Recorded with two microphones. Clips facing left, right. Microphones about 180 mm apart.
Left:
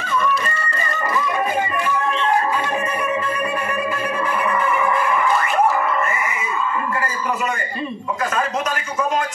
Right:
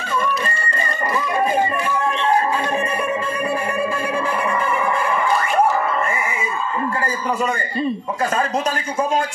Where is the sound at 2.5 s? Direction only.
30° right (ahead or behind).